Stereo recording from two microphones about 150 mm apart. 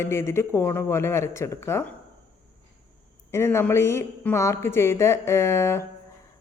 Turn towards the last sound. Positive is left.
turn(degrees=20)  # may be behind; listen again after turning